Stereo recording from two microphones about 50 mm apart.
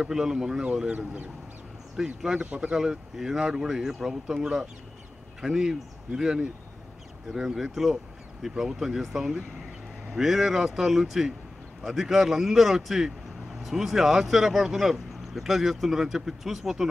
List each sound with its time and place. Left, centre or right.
0.0 s speech: centre
0.9 s speech: right
2.0 s speech: centre